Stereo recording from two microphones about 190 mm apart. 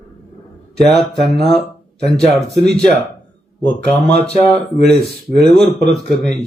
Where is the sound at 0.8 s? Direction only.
Centre (ahead or behind).